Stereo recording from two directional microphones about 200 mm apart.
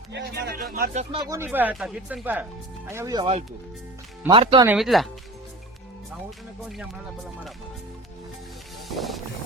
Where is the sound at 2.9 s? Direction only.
20° right (ahead or behind).